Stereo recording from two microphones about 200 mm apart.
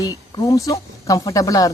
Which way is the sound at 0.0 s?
15° left (ahead or behind).